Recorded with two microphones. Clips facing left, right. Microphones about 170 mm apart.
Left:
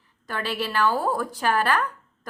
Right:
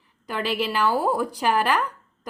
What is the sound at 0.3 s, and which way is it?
Speech, 10° right (ahead or behind).